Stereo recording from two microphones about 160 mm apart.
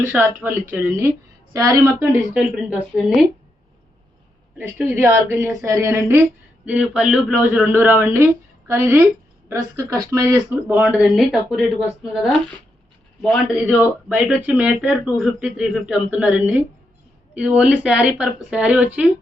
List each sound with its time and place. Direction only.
0.1 s a woman's voice: 10° right (ahead or behind)
2.3 s speech: 10° right (ahead or behind)
4.5 s speech: 10° right (ahead or behind)